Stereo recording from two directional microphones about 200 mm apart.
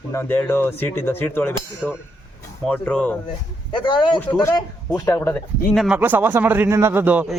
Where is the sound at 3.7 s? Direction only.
25° left (ahead or behind).